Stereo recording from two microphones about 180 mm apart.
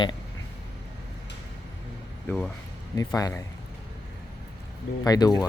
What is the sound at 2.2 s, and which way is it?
Speech, 5° left (ahead or behind).